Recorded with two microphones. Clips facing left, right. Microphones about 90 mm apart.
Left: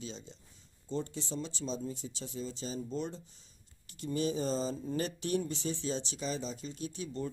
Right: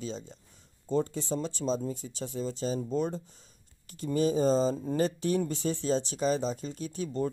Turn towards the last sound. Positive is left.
turn(degrees=-45)  # may be behind; listen again after turning